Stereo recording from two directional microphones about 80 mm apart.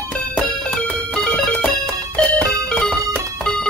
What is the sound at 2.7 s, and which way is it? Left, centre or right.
Music, centre.